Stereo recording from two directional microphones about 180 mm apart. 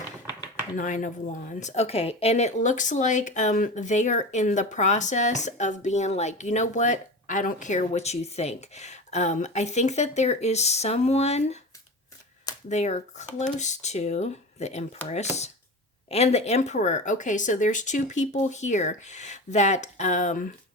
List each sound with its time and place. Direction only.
0.8 s speech: 45° left (ahead or behind)
12.6 s speech: 40° left (ahead or behind)
16.0 s speech: 35° left (ahead or behind)